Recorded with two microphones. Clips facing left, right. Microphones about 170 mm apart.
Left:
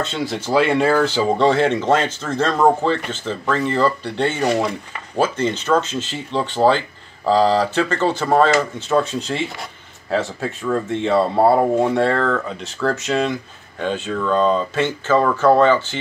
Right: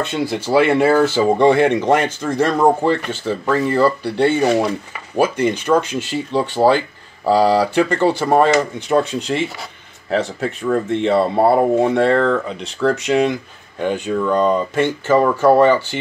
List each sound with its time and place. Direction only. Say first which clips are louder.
0.0 s speech: right 3 dB; 10° right (ahead or behind)